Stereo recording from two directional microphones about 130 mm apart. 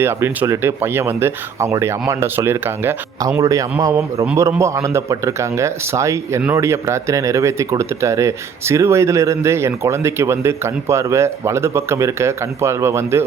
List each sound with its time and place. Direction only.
0.0 s speech: 20° right (ahead or behind)